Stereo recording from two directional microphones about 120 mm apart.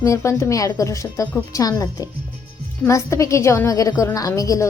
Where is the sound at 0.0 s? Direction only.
25° left (ahead or behind).